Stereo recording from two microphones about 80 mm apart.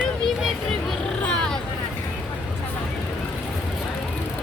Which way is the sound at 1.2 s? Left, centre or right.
Centre.